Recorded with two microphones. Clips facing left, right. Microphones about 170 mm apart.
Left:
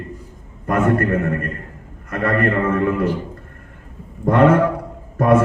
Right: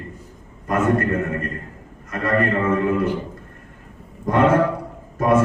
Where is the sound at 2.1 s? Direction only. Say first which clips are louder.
Left 2 dB; 60° left (ahead or behind).